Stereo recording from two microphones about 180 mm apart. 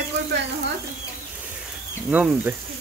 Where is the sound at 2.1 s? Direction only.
10° right (ahead or behind).